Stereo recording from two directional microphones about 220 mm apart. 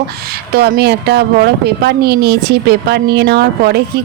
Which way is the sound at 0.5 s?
45° right (ahead or behind).